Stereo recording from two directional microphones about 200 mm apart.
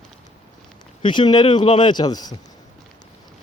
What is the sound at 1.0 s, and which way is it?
Speech, 25° left (ahead or behind).